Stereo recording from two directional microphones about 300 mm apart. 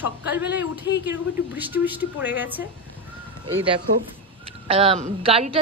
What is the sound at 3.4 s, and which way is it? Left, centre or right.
A woman's voice, centre.